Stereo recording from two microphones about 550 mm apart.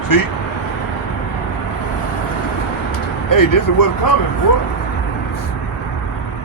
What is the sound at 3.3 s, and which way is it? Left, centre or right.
Speech, left.